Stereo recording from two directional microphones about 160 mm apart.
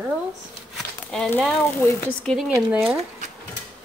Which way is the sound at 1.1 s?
5° left (ahead or behind).